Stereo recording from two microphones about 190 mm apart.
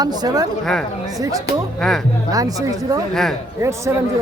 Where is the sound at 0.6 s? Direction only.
5° left (ahead or behind).